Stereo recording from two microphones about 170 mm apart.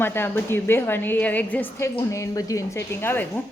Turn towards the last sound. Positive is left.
turn(degrees=10)  # may be behind; listen again after turning